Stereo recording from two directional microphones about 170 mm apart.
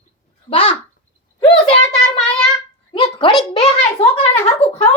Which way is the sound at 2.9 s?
25° left (ahead or behind).